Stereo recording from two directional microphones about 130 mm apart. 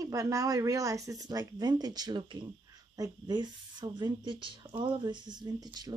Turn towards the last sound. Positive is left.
turn(degrees=-30)  # may be behind; listen again after turning